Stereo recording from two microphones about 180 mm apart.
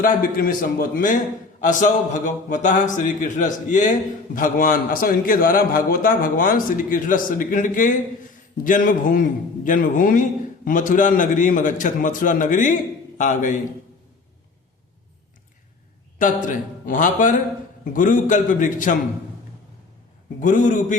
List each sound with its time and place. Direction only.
0.0 s a man's voice: 50° left (ahead or behind)
16.1 s a man's voice: 45° left (ahead or behind)
20.4 s a man's voice: 45° left (ahead or behind)